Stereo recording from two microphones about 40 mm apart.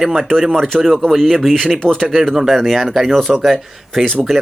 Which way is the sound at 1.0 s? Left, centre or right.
Centre.